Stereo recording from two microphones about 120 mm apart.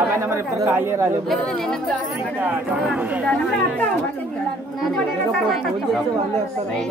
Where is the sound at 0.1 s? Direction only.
25° right (ahead or behind).